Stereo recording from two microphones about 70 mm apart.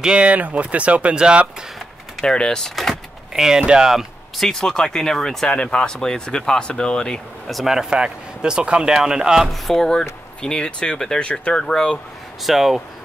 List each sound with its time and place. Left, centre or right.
0.0 s speech: centre
2.2 s speech: centre
9.5 s speech: centre
12.4 s speech: centre